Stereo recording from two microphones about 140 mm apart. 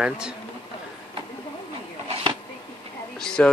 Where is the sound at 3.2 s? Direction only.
5° left (ahead or behind).